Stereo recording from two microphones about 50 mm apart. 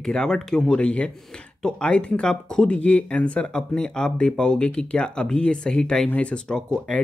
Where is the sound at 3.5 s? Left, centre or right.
Centre.